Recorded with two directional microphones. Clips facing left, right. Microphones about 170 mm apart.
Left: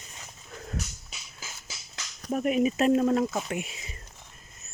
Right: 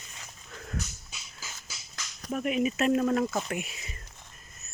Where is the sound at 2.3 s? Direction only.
40° left (ahead or behind).